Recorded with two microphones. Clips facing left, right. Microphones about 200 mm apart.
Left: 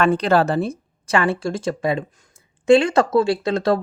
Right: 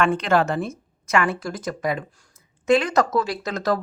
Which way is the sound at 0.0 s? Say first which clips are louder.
Left 3 dB; 35° left (ahead or behind).